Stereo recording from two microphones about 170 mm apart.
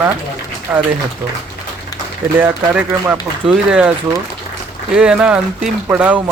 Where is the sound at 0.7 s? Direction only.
10° right (ahead or behind).